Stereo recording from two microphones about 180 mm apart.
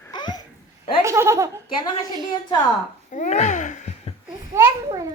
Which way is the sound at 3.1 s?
40° left (ahead or behind).